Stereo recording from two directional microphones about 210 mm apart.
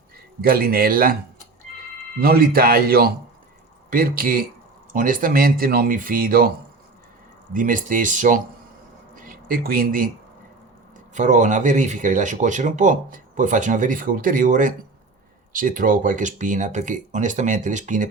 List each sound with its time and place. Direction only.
0.4 s speech: 45° right (ahead or behind)
2.2 s speech: 45° right (ahead or behind)
7.5 s speech: 40° right (ahead or behind)
9.1 s a sound: 40° right (ahead or behind)
11.1 s speech: 35° right (ahead or behind)